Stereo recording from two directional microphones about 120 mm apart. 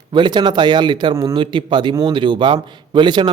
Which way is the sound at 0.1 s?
40° right (ahead or behind).